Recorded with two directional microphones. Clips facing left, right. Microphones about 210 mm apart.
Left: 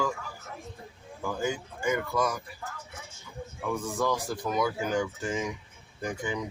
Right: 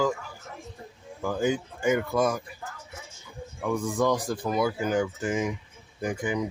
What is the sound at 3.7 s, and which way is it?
Speech, 15° right (ahead or behind).